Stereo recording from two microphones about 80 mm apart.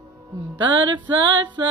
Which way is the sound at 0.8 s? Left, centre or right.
Right.